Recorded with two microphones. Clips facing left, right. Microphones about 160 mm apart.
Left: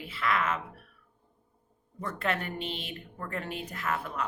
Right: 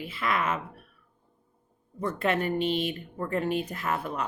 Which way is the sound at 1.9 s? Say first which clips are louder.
Right 5 dB; 20° right (ahead or behind).